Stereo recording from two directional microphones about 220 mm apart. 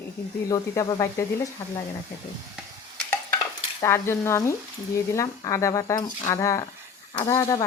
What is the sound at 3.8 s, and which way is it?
Speech, 10° left (ahead or behind).